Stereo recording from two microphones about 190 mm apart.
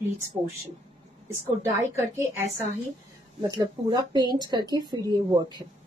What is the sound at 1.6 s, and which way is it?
Speech, 10° right (ahead or behind).